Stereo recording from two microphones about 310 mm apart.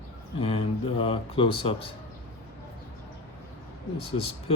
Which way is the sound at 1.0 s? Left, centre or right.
Centre.